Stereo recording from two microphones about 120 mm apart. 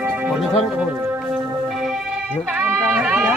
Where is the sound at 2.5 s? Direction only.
5° right (ahead or behind).